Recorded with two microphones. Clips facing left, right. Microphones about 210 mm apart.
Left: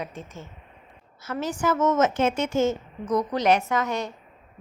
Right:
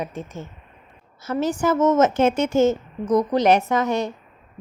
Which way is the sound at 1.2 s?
25° right (ahead or behind).